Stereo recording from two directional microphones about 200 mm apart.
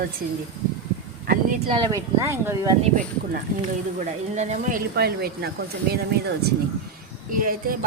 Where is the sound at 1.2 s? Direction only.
45° right (ahead or behind).